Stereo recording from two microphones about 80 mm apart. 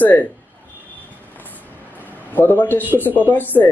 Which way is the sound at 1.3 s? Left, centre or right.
Left.